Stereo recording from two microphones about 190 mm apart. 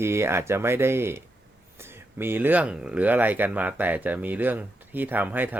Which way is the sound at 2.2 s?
10° right (ahead or behind).